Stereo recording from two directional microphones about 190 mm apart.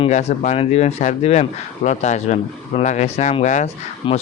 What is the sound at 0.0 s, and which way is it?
A man's voice, 35° left (ahead or behind).